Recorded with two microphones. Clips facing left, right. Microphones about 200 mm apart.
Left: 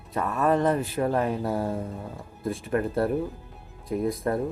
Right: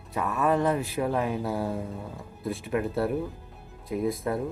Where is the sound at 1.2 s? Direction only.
5° right (ahead or behind).